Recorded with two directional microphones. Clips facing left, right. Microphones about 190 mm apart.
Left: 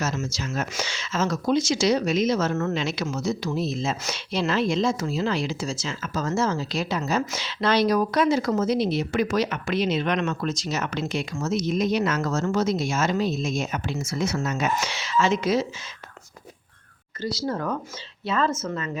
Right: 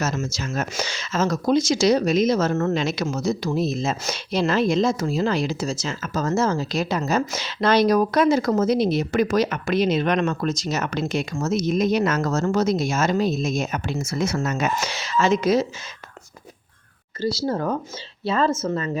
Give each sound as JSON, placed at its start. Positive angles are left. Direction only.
{"t": 0.0, "sound": "speech", "side_deg": -45}
{"t": 17.2, "sound": "speech", "side_deg": -30}